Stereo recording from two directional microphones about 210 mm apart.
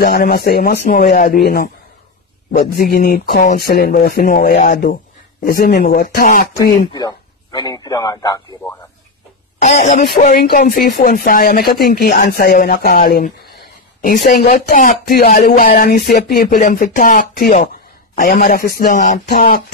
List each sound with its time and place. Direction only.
0.0 s speech: 45° left (ahead or behind)
6.9 s a man's voice: 20° left (ahead or behind)
9.6 s speech: 35° left (ahead or behind)